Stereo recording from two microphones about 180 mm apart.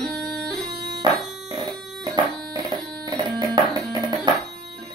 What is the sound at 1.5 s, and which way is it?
Music, 25° right (ahead or behind).